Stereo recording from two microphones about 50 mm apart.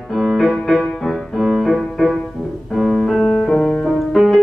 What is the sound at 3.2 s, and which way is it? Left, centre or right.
Music, centre.